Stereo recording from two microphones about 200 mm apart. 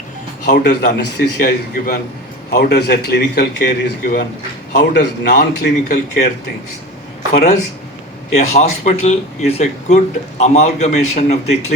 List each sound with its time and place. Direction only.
0.4 s a man's voice: 40° left (ahead or behind); by 4.3 s 60° left (ahead or behind)
4.8 s a man's voice: 45° left (ahead or behind)
8.4 s speech: 35° left (ahead or behind)